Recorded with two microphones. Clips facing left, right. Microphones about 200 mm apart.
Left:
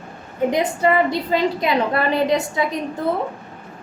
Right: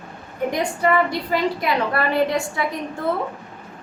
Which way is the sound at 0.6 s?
20° left (ahead or behind).